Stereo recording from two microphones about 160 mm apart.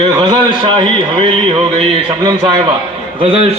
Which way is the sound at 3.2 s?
35° right (ahead or behind).